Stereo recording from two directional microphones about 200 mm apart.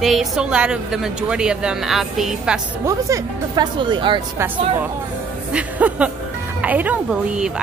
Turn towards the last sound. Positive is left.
turn(degrees=-5)  # may be behind; listen again after turning